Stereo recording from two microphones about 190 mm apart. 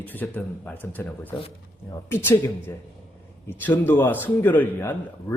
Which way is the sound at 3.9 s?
10° left (ahead or behind).